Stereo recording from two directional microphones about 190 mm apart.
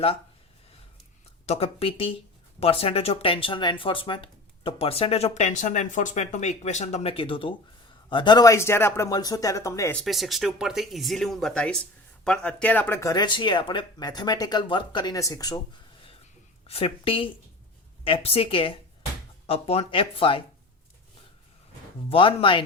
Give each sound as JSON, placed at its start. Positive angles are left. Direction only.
{"t": 1.5, "sound": "speech", "side_deg": 30}
{"t": 10.0, "sound": "speech", "side_deg": 0}
{"t": 16.6, "sound": "speech", "side_deg": 30}
{"t": 22.1, "sound": "speech", "side_deg": 30}